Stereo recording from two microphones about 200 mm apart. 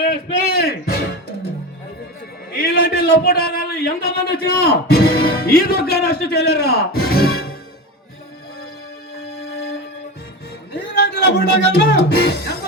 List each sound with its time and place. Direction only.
0.1 s a sound: 50° left (ahead or behind)
2.6 s a man's voice: 50° left (ahead or behind)
10.9 s speech: 55° left (ahead or behind)